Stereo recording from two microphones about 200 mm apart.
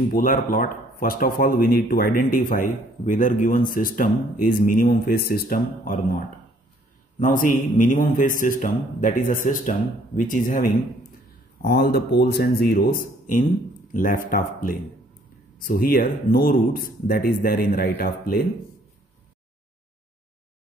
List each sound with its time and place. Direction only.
0.1 s a man's voice: 45° left (ahead or behind)